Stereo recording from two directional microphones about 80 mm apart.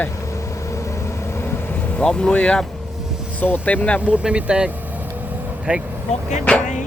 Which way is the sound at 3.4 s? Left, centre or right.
Left.